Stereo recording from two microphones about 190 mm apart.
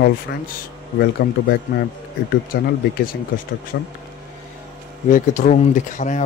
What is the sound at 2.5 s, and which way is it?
Speech, 50° left (ahead or behind).